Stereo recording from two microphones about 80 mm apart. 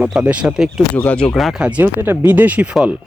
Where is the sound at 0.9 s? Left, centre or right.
Centre.